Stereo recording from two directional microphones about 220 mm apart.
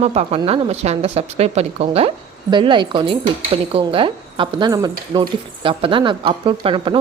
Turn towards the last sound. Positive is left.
turn(degrees=-25)  # may be behind; listen again after turning